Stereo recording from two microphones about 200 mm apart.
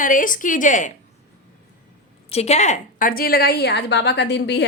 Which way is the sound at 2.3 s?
30° left (ahead or behind).